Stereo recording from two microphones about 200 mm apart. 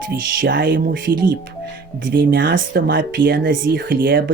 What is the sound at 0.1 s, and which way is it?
Speech, 50° right (ahead or behind).